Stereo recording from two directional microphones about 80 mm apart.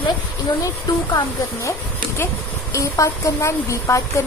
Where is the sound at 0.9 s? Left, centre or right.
Left.